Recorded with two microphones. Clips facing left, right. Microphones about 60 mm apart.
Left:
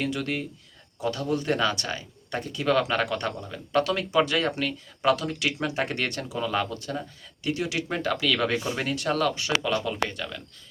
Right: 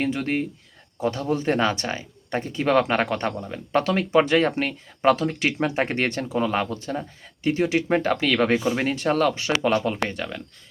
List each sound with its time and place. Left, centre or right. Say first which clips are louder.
0.0 s speech: right 4 dB; right